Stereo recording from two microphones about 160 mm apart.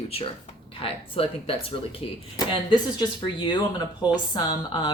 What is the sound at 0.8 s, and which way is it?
Speech, 35° left (ahead or behind).